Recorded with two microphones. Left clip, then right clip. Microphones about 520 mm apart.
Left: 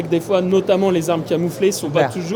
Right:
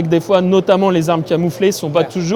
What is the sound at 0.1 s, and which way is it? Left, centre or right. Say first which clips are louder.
Speech: right 4 dB; right.